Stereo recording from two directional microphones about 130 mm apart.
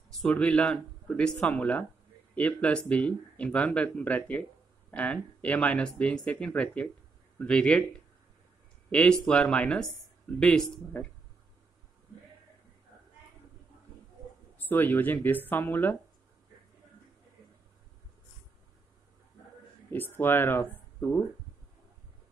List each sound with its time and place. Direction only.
0.1 s speech: 5° left (ahead or behind)
9.2 s speech: 5° left (ahead or behind)
14.6 s speech: 15° left (ahead or behind)
19.9 s speech: 15° left (ahead or behind)